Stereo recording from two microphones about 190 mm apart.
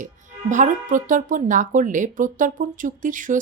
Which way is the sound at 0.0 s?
40° right (ahead or behind).